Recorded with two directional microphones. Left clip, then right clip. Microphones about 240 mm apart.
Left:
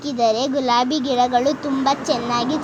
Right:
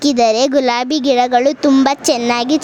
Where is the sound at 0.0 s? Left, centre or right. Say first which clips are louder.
Right 7 dB; right.